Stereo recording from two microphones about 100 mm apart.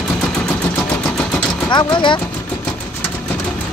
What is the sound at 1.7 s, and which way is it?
Speech, 50° left (ahead or behind).